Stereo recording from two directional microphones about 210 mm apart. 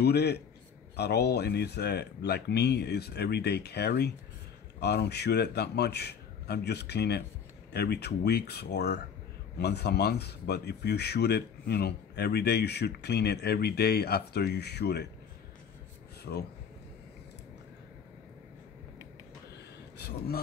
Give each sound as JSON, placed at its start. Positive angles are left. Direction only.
{"t": 0.0, "sound": "speech", "side_deg": 50}